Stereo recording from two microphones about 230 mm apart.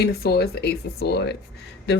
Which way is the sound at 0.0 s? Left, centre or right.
Left.